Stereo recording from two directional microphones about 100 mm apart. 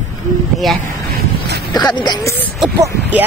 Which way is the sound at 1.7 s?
45° left (ahead or behind).